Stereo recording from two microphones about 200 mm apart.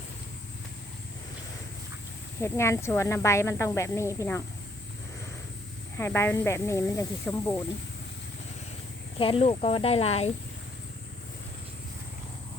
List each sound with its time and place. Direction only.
2.4 s speech: 15° left (ahead or behind)
6.0 s speech: 10° left (ahead or behind)
9.1 s speech: 25° left (ahead or behind)